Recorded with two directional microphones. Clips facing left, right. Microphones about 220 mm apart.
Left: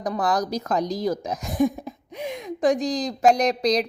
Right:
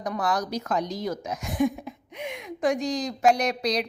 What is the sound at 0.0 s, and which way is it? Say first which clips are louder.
A woman's voice: left 3 dB; 35° left (ahead or behind).